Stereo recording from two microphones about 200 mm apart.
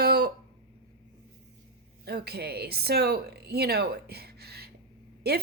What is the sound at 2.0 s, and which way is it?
Speech, 55° right (ahead or behind).